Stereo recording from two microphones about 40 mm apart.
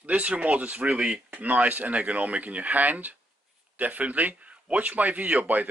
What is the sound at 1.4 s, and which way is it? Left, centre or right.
A man's voice, right.